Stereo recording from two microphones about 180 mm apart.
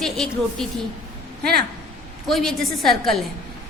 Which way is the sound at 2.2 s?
Centre (ahead or behind).